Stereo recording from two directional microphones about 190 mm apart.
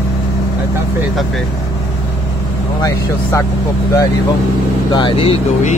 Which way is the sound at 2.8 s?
15° left (ahead or behind).